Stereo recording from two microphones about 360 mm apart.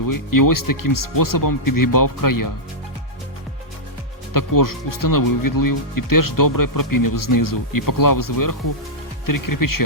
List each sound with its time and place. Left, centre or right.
0.0 s speech: left
4.4 s speech: left